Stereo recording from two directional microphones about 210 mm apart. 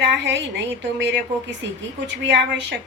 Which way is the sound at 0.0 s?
60° right (ahead or behind).